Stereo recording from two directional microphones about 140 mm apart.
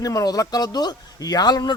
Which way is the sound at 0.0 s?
25° left (ahead or behind).